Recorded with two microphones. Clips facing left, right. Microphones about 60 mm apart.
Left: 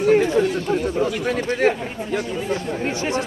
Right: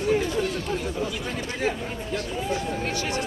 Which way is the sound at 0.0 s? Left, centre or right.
Left.